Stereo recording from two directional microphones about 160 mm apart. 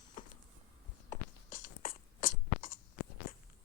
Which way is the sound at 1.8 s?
60° left (ahead or behind).